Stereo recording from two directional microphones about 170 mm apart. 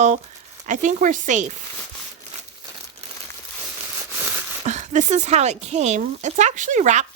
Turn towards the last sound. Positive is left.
turn(degrees=-45)  # may be behind; listen again after turning